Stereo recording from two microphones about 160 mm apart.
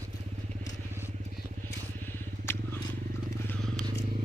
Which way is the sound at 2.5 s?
15° left (ahead or behind).